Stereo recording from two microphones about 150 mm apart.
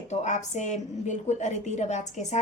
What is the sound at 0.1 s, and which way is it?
A woman's voice, 50° left (ahead or behind).